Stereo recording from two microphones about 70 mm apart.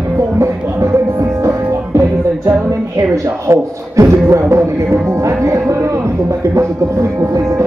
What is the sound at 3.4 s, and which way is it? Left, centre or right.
Music, right.